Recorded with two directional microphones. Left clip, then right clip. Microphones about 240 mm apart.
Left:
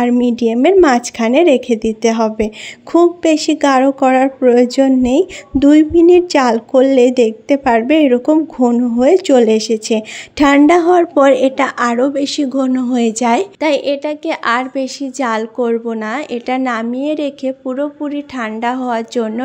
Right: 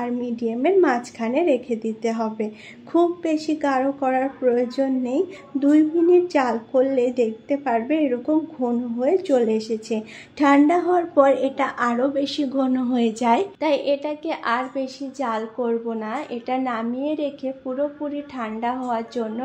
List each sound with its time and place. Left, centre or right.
0.0 s a woman's voice: left